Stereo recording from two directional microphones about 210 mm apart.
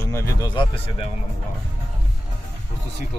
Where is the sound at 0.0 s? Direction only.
15° left (ahead or behind).